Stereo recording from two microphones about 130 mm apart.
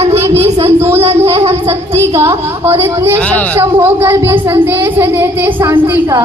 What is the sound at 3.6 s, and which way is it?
Speech, 20° right (ahead or behind).